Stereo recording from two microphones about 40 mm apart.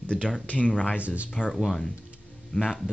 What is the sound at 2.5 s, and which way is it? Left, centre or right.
Speech, left.